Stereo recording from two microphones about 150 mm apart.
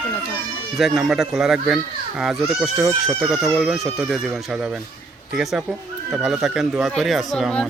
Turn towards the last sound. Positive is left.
turn(degrees=5)  # may be behind; listen again after turning